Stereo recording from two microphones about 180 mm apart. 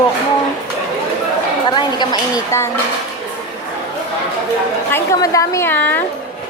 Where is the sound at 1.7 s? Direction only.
20° left (ahead or behind).